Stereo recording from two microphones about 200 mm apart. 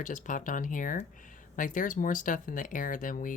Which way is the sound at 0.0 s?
40° left (ahead or behind).